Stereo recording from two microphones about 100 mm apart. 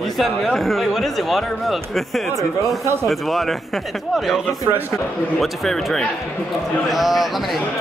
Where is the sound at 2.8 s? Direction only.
25° right (ahead or behind).